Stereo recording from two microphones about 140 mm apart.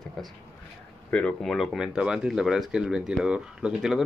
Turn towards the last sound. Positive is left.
turn(degrees=-5)  # may be behind; listen again after turning